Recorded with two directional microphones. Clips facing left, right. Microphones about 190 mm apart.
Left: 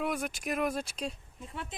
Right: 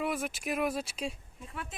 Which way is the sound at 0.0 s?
Centre (ahead or behind).